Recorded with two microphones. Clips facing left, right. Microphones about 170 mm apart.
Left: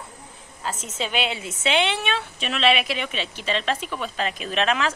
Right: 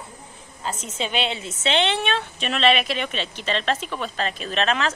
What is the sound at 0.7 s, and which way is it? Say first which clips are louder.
A woman's voice: right 1 dB; 5° left (ahead or behind).